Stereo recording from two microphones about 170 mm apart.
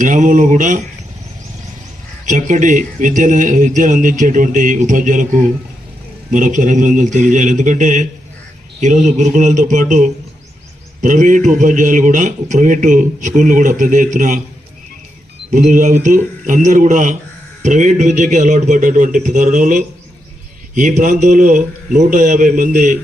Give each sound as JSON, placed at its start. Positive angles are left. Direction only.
{"t": 0.0, "sound": "a man's voice", "side_deg": -50}
{"t": 2.2, "sound": "a man's voice", "side_deg": -45}
{"t": 15.5, "sound": "a man's voice", "side_deg": -50}